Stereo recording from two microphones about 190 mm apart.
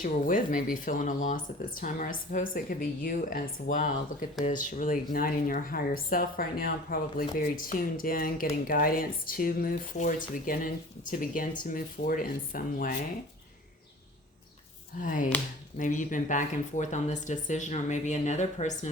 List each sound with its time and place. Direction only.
0.0 s speech: 45° left (ahead or behind)
15.0 s speech: 45° left (ahead or behind)